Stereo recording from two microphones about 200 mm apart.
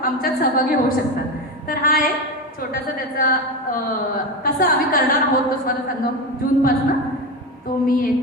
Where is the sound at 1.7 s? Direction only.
45° left (ahead or behind).